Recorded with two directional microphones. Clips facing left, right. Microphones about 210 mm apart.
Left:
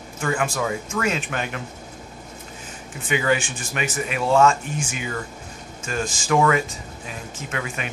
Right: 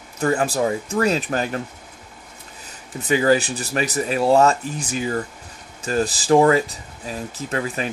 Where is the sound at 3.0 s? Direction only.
35° right (ahead or behind).